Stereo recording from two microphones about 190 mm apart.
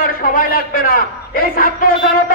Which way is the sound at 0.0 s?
50° left (ahead or behind).